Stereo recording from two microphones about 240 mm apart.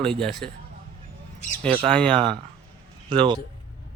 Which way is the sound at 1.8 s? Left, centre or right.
Centre.